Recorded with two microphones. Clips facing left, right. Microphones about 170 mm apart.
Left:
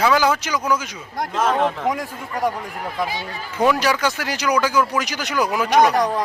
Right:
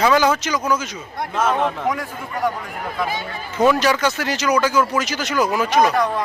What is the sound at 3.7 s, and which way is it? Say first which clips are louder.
Speech: right 2 dB; 10° left (ahead or behind).